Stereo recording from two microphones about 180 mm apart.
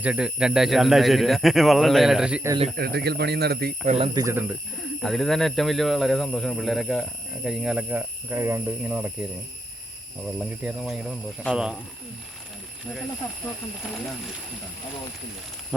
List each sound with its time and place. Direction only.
0.0 s speech: 5° right (ahead or behind)
2.7 s speech: 60° right (ahead or behind)
3.8 s speech: 35° right (ahead or behind)
4.1 s speech: 15° right (ahead or behind)
5.0 s speech: centre (ahead or behind)
10.3 s speech: 10° right (ahead or behind)